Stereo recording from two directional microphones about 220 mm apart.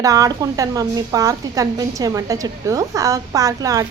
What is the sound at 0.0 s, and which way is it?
A woman's voice, 15° right (ahead or behind).